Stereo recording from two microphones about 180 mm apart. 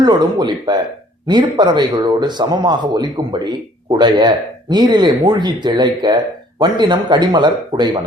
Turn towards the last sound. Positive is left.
turn(degrees=-25)  # may be behind; listen again after turning